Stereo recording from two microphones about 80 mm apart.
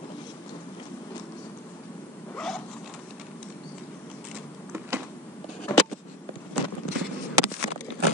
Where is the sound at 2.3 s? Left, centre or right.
Centre.